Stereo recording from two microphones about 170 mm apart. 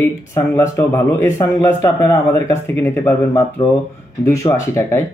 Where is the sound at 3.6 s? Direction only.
30° left (ahead or behind).